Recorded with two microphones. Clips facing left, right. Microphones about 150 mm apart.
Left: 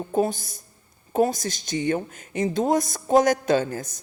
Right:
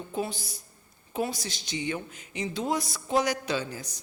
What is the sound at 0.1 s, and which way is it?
A man's voice, 45° left (ahead or behind).